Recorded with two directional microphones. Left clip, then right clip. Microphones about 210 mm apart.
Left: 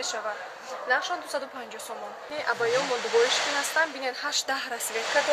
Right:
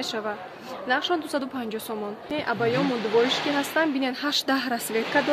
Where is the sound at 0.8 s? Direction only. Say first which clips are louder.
Right 2 dB; 45° right (ahead or behind).